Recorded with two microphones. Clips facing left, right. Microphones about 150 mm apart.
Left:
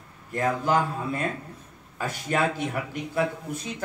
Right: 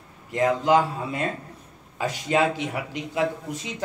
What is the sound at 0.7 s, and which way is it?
Speech, 15° right (ahead or behind).